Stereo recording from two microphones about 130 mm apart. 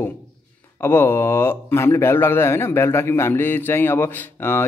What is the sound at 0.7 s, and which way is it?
A man's voice, 15° left (ahead or behind).